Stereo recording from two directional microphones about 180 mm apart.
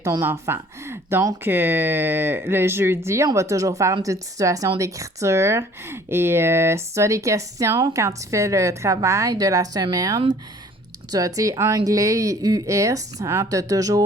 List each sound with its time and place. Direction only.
0.0 s speech: 15° right (ahead or behind)